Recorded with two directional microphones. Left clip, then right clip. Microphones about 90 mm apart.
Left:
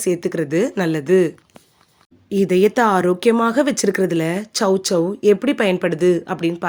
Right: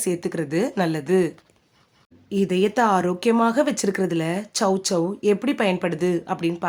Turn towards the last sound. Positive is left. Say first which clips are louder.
# left 6 dB
turn(degrees=40)  # may be behind; listen again after turning